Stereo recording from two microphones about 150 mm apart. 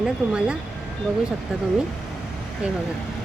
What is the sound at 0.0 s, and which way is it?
Speech, 5° right (ahead or behind).